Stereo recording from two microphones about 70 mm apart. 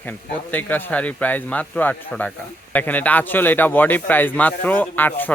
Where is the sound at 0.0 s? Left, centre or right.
Left.